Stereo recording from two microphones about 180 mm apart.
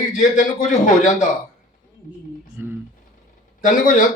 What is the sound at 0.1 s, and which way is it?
Speech, 45° left (ahead or behind).